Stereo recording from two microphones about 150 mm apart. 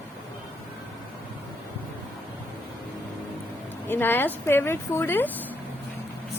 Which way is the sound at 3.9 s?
15° left (ahead or behind).